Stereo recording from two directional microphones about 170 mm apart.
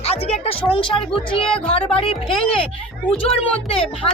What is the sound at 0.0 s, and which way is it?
A woman's voice, 35° left (ahead or behind).